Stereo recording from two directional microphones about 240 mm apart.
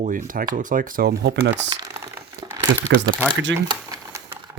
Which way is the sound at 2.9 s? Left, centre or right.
Right.